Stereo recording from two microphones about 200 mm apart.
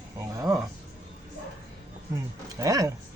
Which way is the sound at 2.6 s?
15° right (ahead or behind).